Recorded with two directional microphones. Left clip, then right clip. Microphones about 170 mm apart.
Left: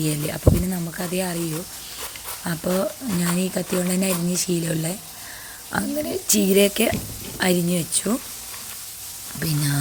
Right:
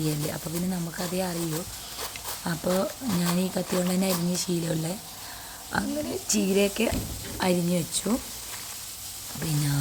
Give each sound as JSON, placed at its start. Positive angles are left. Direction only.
{"t": 0.0, "sound": "speech", "side_deg": 15}
{"t": 2.4, "sound": "speech", "side_deg": 10}